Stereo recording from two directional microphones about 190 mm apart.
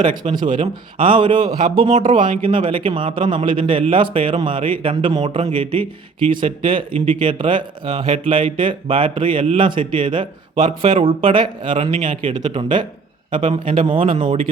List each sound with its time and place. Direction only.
0.3 s speech: 25° right (ahead or behind)
2.0 s speech: 45° right (ahead or behind)
2.4 s speech: 30° right (ahead or behind)